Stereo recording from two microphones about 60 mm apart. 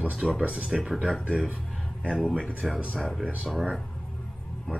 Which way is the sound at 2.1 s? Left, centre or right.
Centre.